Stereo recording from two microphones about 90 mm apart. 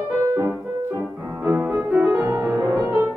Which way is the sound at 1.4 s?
20° right (ahead or behind).